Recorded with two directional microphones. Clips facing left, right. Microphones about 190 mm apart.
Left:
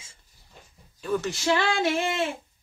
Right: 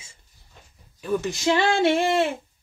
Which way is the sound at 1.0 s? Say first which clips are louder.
Right 3 dB; 10° right (ahead or behind).